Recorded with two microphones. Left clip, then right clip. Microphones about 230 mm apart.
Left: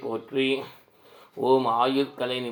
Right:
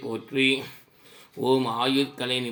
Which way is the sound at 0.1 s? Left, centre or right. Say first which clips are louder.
Right 2 dB; right.